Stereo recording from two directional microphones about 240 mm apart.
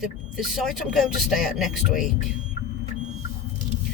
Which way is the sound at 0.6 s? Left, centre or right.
Centre.